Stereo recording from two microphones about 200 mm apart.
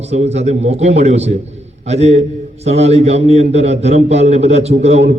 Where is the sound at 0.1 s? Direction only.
35° right (ahead or behind).